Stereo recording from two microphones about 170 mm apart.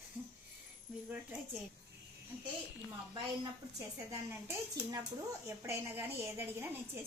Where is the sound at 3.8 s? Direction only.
15° right (ahead or behind).